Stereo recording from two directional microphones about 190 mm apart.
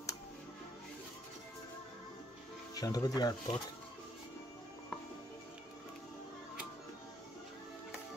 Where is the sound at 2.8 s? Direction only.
20° left (ahead or behind).